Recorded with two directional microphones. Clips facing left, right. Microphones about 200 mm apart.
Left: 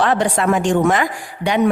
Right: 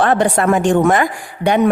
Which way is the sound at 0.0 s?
50° right (ahead or behind).